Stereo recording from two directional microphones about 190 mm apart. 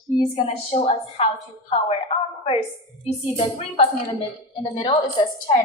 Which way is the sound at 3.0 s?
35° left (ahead or behind).